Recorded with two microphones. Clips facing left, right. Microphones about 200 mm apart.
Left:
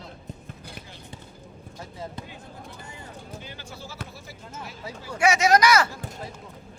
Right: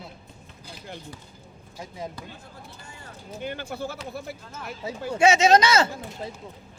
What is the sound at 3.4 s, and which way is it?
Speech, 55° right (ahead or behind).